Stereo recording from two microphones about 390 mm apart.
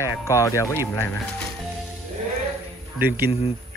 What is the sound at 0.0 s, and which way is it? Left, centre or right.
Speech, centre.